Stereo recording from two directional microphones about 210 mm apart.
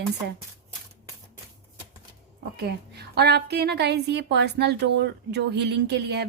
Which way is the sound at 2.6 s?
50° right (ahead or behind).